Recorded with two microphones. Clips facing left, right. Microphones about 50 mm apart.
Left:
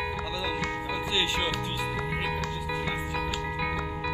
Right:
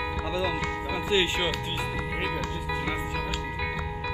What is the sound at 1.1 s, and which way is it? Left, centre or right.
Speech, right.